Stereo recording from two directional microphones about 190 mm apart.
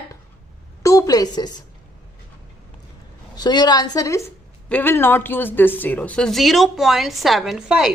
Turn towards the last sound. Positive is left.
turn(degrees=-5)  # may be behind; listen again after turning